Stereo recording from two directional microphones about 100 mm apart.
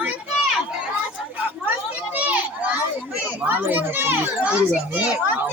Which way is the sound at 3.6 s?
20° right (ahead or behind).